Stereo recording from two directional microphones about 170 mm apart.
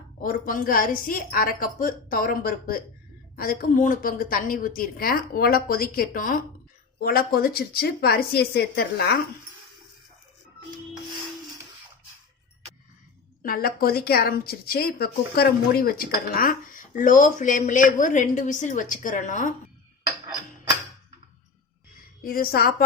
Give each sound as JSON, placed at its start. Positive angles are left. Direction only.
{"t": 0.2, "sound": "speech", "side_deg": 55}
{"t": 13.4, "sound": "a woman's voice", "side_deg": 60}
{"t": 22.2, "sound": "speech", "side_deg": 60}